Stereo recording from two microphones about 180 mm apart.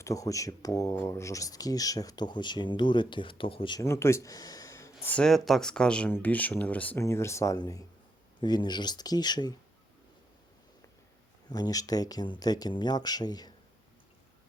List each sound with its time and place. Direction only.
0.0 s speech: 20° left (ahead or behind)
5.0 s speech: 5° left (ahead or behind); by 9.6 s 25° left (ahead or behind)
11.4 s speech: 20° left (ahead or behind)